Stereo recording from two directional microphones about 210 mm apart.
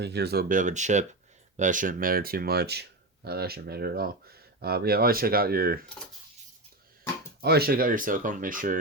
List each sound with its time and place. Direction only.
0.0 s speech: 50° right (ahead or behind)
7.4 s speech: 50° right (ahead or behind)